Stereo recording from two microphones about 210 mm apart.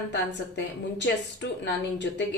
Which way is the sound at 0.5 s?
55° left (ahead or behind).